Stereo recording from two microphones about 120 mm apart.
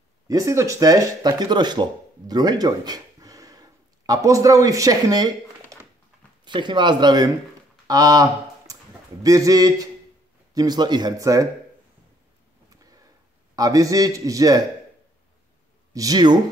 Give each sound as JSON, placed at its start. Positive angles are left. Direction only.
{"t": 0.3, "sound": "a man's voice", "side_deg": -25}
{"t": 7.8, "sound": "a sound", "side_deg": -30}
{"t": 9.2, "sound": "a man's voice", "side_deg": -30}
{"t": 13.6, "sound": "a man's voice", "side_deg": -30}
{"t": 15.9, "sound": "speech", "side_deg": -30}